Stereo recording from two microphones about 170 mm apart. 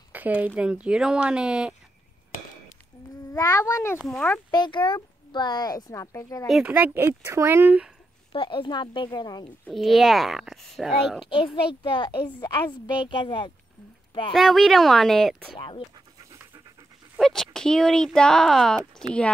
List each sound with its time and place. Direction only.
0.1 s a sound: 10° right (ahead or behind)
0.6 s speech: 5° right (ahead or behind)
3.3 s speech: 20° left (ahead or behind)
4.0 s speech: 5° left (ahead or behind)
4.3 s speech: 25° left (ahead or behind)
6.4 s a woman's voice: 5° right (ahead or behind)
8.3 s speech: 30° left (ahead or behind)
9.7 s speech: centre (ahead or behind)
11.2 s speech: 30° left (ahead or behind)
14.3 s speech: centre (ahead or behind)
15.5 s speech: 30° left (ahead or behind)
16.3 s pant: 20° right (ahead or behind)
17.2 s speech: centre (ahead or behind)